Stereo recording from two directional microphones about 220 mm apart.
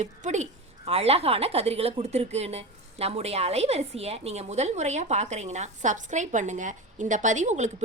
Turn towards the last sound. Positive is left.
turn(degrees=-30)  # may be behind; listen again after turning